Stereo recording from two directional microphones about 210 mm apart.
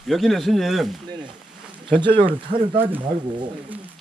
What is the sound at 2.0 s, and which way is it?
Speech, 25° right (ahead or behind).